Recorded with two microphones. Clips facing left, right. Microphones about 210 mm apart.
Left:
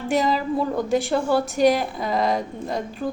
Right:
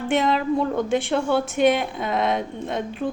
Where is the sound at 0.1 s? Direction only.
Centre (ahead or behind).